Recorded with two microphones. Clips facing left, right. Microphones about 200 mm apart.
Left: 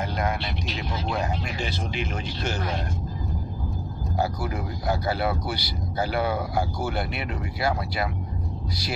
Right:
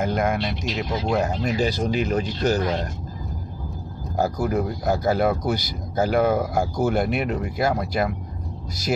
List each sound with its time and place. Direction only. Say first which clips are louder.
0.0 s vehicle: right 5 dB; 50° right (ahead or behind)
1.1 s speech: right 8 dB; 45° right (ahead or behind)
4.2 s speech: right 6 dB; 45° right (ahead or behind)